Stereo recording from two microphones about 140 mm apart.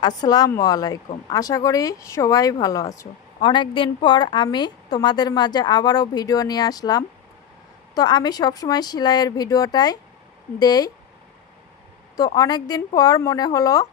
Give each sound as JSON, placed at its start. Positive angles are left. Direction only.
{"t": 0.0, "sound": "speech", "side_deg": 30}
{"t": 3.3, "sound": "a woman's voice", "side_deg": 35}
{"t": 12.2, "sound": "speech", "side_deg": 30}